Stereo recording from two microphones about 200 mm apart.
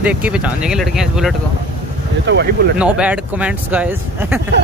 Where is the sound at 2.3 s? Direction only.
60° right (ahead or behind).